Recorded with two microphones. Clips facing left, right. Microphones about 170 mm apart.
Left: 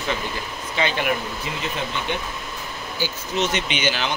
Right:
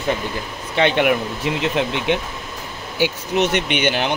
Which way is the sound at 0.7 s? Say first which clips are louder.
Right 7 dB; 65° right (ahead or behind).